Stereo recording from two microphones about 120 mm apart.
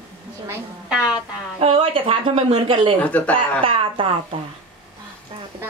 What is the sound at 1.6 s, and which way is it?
Speech, 55° right (ahead or behind).